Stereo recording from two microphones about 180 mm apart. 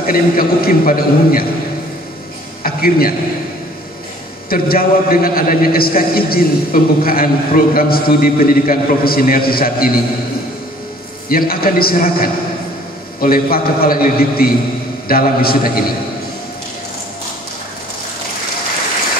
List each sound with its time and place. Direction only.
0.0 s a man's voice: 55° left (ahead or behind)
2.6 s a man's voice: 55° left (ahead or behind)
4.5 s a man's voice: 55° left (ahead or behind)
11.2 s a man's voice: 55° left (ahead or behind)